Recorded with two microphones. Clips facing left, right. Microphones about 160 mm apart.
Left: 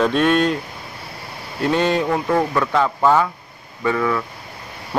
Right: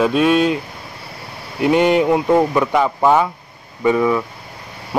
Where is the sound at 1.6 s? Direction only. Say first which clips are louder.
Right 5 dB; 15° right (ahead or behind).